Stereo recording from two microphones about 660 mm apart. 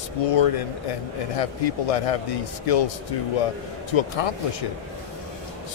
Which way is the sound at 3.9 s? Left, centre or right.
Left.